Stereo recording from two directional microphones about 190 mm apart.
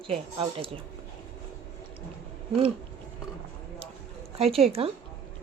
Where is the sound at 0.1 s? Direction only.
30° right (ahead or behind).